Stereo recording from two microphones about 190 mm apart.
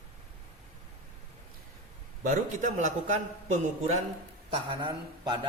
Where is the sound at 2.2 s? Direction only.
45° right (ahead or behind).